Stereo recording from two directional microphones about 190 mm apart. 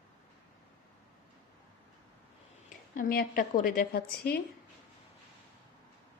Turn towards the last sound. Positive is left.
turn(degrees=55)  # may be behind; listen again after turning